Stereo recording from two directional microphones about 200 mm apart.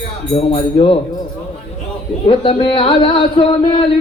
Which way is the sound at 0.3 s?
25° left (ahead or behind).